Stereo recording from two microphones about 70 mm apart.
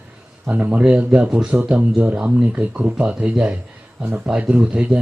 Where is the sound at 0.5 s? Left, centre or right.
Centre.